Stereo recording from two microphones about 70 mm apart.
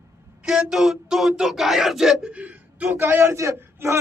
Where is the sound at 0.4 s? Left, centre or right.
Centre.